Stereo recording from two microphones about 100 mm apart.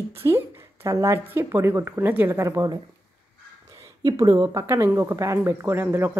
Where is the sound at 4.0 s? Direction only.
40° right (ahead or behind); by 6.1 s 20° right (ahead or behind).